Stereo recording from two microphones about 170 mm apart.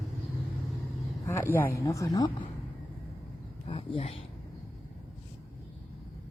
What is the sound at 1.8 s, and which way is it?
Speech, 20° left (ahead or behind).